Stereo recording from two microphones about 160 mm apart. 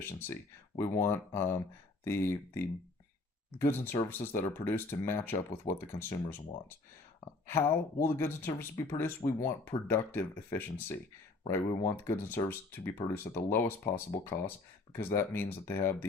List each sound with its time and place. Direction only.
0.0 s speech: 15° left (ahead or behind)
7.4 s speech: 15° left (ahead or behind)